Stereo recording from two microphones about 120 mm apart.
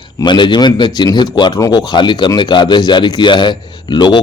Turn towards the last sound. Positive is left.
turn(degrees=40)  # may be behind; listen again after turning